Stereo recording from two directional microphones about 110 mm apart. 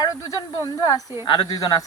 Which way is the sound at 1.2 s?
50° left (ahead or behind).